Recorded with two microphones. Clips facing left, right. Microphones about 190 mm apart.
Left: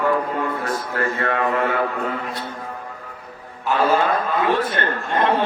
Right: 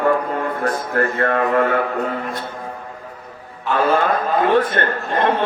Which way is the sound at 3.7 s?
45° right (ahead or behind).